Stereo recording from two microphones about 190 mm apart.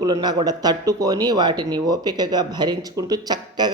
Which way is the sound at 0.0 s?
20° right (ahead or behind).